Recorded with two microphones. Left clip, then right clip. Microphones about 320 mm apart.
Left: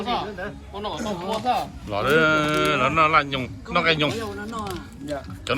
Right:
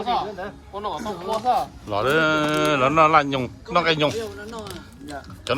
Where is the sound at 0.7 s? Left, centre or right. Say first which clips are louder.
Right 1 dB; centre.